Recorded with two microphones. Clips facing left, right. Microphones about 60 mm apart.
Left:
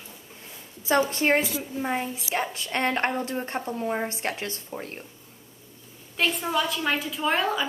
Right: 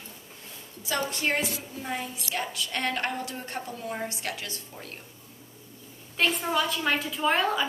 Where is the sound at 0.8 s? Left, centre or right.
Left.